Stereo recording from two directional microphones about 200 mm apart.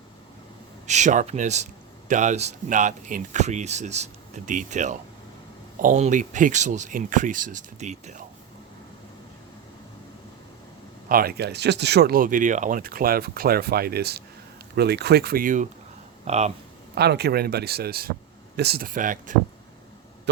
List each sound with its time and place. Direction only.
0.9 s speech: 35° right (ahead or behind)
11.1 s speech: 50° right (ahead or behind)
16.9 s speech: 55° right (ahead or behind)